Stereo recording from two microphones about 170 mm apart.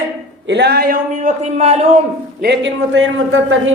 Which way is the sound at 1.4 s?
40° right (ahead or behind).